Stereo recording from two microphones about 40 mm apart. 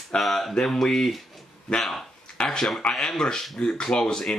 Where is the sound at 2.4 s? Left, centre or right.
Centre.